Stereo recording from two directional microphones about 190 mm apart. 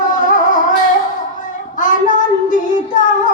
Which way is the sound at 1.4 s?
45° left (ahead or behind).